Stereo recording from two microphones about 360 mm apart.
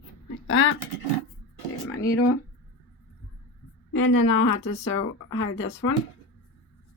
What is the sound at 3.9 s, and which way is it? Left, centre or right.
Speech, left.